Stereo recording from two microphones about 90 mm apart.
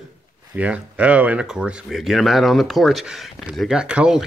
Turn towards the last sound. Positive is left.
turn(degrees=-10)  # may be behind; listen again after turning